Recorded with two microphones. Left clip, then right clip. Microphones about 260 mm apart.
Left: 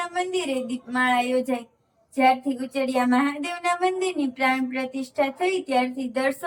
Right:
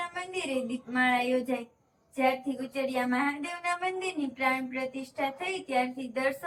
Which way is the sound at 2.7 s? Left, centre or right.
Left.